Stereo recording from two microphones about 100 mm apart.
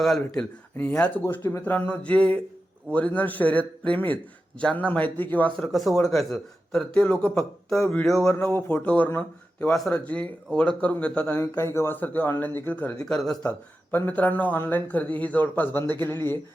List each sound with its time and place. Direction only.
0.0 s a man's voice: centre (ahead or behind)
0.8 s speech: 15° left (ahead or behind)
1.2 s speech: 25° left (ahead or behind)
5.5 s a man's voice: centre (ahead or behind)
8.3 s speech: 20° left (ahead or behind)
13.1 s a man's voice: 5° left (ahead or behind)
13.9 s speech: 20° left (ahead or behind)